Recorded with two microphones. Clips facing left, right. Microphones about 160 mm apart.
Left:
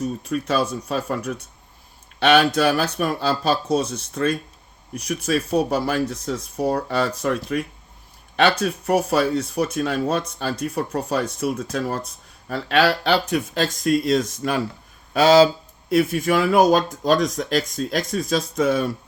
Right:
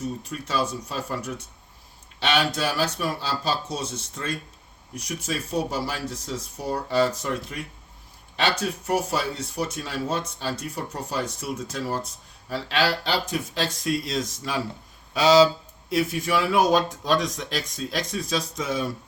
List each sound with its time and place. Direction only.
0.3 s speech: 60° left (ahead or behind)